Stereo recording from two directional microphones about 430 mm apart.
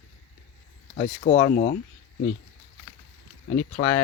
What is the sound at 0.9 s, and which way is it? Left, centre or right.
Speech, centre.